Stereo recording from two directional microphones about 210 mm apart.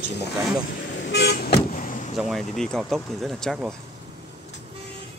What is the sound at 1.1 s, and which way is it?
Vehicle, 50° left (ahead or behind).